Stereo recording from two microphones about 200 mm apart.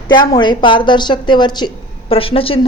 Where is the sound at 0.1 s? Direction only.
20° left (ahead or behind).